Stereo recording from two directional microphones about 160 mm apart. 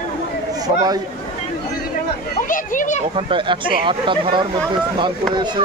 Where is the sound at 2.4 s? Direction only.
55° left (ahead or behind).